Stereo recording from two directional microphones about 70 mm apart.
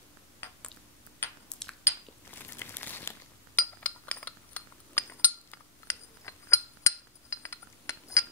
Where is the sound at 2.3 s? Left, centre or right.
Left.